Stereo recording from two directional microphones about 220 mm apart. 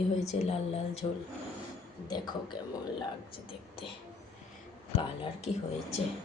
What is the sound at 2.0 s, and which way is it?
Speech, 20° left (ahead or behind).